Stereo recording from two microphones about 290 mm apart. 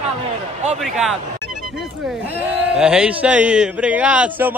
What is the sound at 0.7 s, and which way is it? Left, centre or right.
Speech, centre.